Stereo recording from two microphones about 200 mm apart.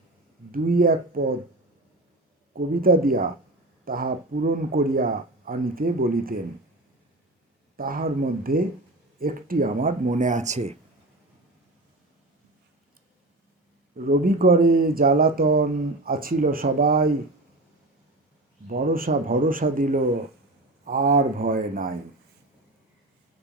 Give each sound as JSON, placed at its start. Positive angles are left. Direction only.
{"t": 0.5, "sound": "speech", "side_deg": -45}
{"t": 2.6, "sound": "speech", "side_deg": -45}
{"t": 7.8, "sound": "speech", "side_deg": -45}
{"t": 13.9, "sound": "speech", "side_deg": -45}
{"t": 18.7, "sound": "speech", "side_deg": -45}